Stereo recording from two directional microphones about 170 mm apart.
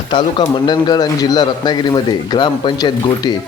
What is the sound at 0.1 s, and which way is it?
A man's voice, 25° left (ahead or behind).